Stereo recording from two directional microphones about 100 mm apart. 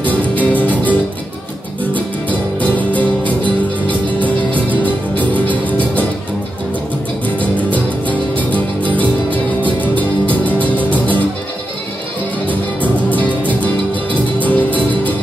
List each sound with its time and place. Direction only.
0.0 s music: 15° left (ahead or behind)
2.0 s music: 15° left (ahead or behind)
4.8 s music: 15° left (ahead or behind)
7.7 s music: 15° left (ahead or behind)
14.4 s music: 15° left (ahead or behind)